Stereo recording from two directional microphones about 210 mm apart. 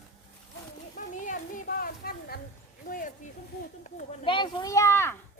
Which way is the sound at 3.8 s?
30° left (ahead or behind).